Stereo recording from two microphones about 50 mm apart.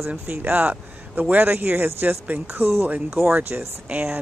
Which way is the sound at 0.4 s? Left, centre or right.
Right.